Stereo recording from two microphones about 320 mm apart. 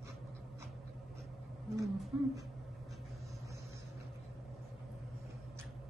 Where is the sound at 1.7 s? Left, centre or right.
Centre.